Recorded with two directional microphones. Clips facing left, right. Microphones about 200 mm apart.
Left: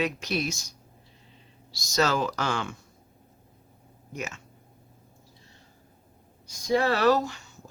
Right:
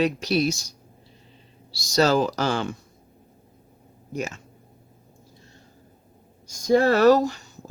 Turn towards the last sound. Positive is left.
turn(degrees=-40)  # may be behind; listen again after turning